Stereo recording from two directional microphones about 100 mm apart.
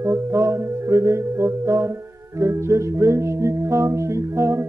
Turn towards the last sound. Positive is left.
turn(degrees=-30)  # may be behind; listen again after turning